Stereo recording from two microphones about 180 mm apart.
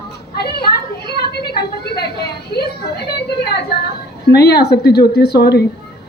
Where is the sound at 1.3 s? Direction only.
60° left (ahead or behind).